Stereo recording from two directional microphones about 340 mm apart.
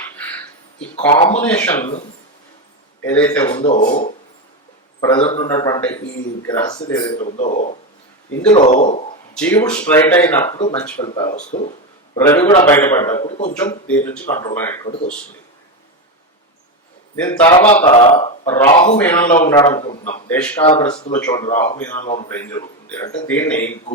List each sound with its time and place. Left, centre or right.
1.3 s speech: centre
3.1 s a man's voice: centre; by 9.0 s left
9.3 s a man's voice: centre; by 11.7 s left
12.1 s a man's voice: centre
13.5 s a man's voice: centre
17.2 s a man's voice: centre
18.7 s speech: left
18.9 s a man's voice: centre
20.3 s a man's voice: centre
22.3 s a man's voice: centre